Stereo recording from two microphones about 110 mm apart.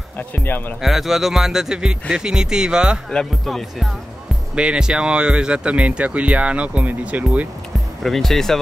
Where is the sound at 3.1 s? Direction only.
5° left (ahead or behind); by 7.4 s 15° right (ahead or behind).